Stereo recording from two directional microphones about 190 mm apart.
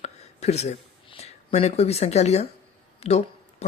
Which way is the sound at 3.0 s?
35° left (ahead or behind).